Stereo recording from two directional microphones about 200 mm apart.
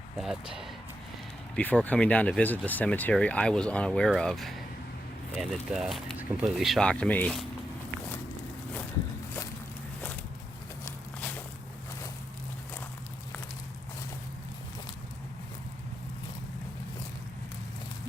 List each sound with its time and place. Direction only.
0.2 s speech: centre (ahead or behind)
10.8 s walk: 10° left (ahead or behind)